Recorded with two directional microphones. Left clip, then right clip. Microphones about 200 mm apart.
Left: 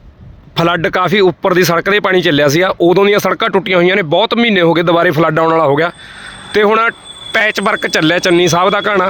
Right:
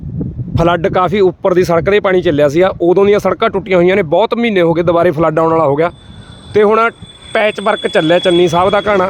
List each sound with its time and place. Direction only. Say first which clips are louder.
0.5 s speech: right 1 dB; 5° left (ahead or behind)